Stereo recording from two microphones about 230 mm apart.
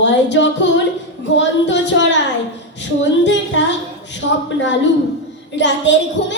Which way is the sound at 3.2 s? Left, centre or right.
Left.